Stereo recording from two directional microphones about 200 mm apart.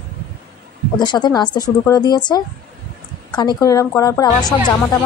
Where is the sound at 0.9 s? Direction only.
20° left (ahead or behind).